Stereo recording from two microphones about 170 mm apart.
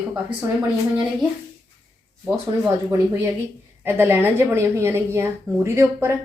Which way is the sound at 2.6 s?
15° right (ahead or behind).